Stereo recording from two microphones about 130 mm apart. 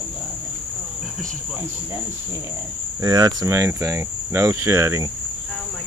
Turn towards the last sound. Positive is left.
turn(degrees=-20)  # may be behind; listen again after turning